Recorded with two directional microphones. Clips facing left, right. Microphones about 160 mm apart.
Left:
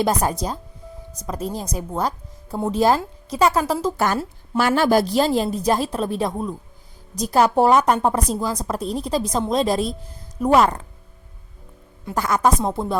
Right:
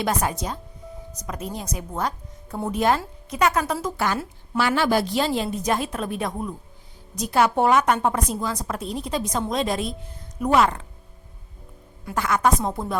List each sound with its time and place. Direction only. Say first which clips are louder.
0.0 s a woman's voice: left 4 dB; 35° left (ahead or behind)
3.9 s a woman's voice: left 3 dB; 45° left (ahead or behind)
12.1 s a woman's voice: left 2 dB; 35° left (ahead or behind)
12.8 s speech: left 4 dB; 25° left (ahead or behind)